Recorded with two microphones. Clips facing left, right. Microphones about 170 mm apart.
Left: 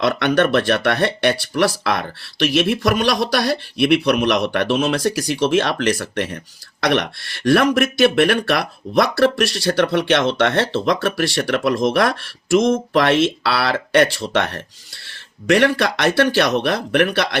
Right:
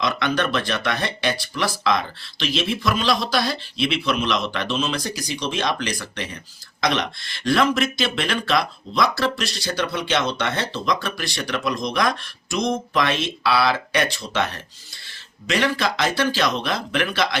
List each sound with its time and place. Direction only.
0.0 s speech: 70° left (ahead or behind)